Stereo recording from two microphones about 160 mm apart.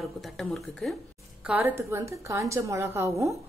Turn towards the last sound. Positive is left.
turn(degrees=-20)  # may be behind; listen again after turning